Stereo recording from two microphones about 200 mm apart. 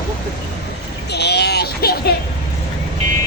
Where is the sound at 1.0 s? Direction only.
55° left (ahead or behind).